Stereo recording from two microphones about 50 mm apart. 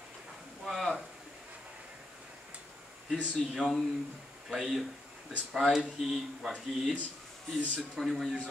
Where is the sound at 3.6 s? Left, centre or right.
Left.